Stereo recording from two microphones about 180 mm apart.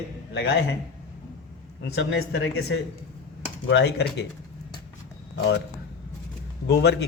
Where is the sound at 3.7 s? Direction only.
70° left (ahead or behind).